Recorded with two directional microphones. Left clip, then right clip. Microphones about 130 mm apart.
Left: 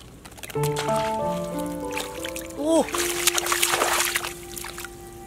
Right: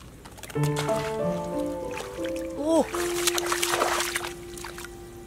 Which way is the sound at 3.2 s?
5° left (ahead or behind).